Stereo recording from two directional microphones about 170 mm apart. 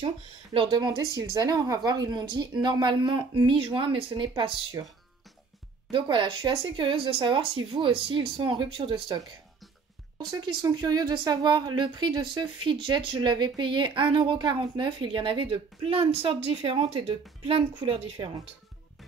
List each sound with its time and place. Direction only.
0.0 s speech: 30° right (ahead or behind)
5.9 s speech: 30° right (ahead or behind)